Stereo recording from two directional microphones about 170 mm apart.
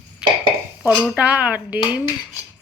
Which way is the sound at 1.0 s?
5° right (ahead or behind).